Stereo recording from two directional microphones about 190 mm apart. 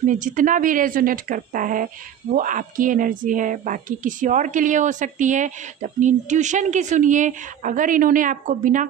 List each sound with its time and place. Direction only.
0.0 s speech: 45° right (ahead or behind)